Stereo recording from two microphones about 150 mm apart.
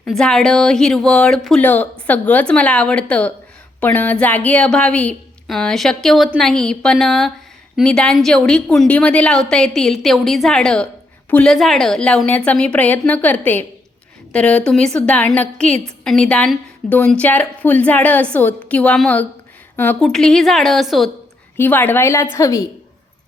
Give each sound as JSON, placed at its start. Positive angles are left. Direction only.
{"t": 0.0, "sound": "a woman's voice", "side_deg": 5}
{"t": 21.6, "sound": "a woman's voice", "side_deg": 10}